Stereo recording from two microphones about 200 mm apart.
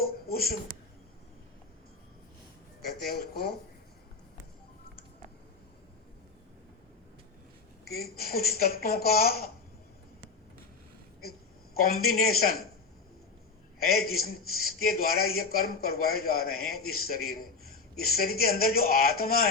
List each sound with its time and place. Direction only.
0.0 s a sound: 50° left (ahead or behind)
3.1 s speech: 50° left (ahead or behind)
7.9 s speech: 50° left (ahead or behind)
11.7 s speech: 50° left (ahead or behind)
13.7 s a man's voice: 50° left (ahead or behind)